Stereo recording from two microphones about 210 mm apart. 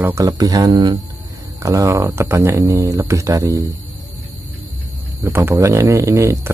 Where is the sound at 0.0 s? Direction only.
15° right (ahead or behind).